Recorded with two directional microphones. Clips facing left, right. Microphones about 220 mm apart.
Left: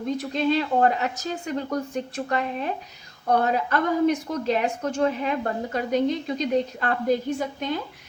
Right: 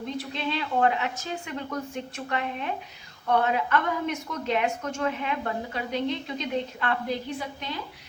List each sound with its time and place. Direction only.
0.2 s a woman's voice: 45° left (ahead or behind)